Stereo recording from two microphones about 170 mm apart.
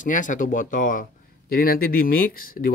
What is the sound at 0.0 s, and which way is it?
A man's voice, 50° left (ahead or behind).